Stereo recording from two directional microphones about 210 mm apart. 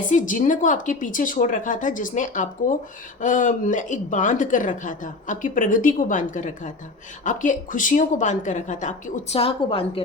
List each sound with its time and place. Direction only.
0.1 s speech: 40° left (ahead or behind)